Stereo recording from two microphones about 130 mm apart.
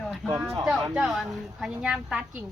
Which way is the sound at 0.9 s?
5° right (ahead or behind).